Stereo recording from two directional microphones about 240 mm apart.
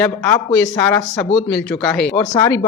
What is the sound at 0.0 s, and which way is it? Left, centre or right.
Speech, centre.